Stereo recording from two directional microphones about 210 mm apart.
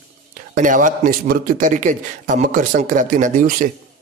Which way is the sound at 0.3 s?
40° right (ahead or behind).